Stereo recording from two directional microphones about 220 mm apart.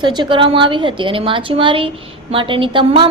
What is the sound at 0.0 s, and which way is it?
A woman's voice, 20° right (ahead or behind).